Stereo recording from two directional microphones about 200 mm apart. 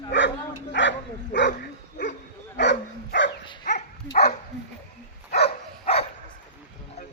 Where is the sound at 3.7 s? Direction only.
35° left (ahead or behind).